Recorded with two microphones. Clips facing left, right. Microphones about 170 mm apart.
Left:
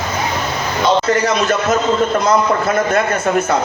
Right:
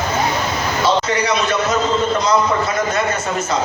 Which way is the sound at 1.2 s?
45° left (ahead or behind).